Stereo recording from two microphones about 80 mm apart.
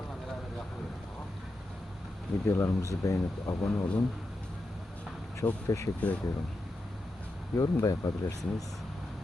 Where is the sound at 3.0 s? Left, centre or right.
Left.